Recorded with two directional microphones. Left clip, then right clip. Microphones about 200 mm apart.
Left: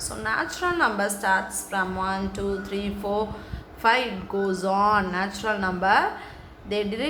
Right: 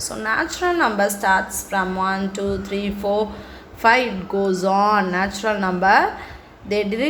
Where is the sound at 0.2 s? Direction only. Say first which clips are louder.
Right 5 dB; 15° right (ahead or behind).